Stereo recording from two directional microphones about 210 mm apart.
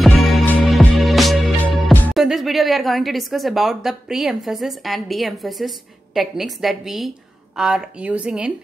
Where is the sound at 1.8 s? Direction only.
Centre (ahead or behind).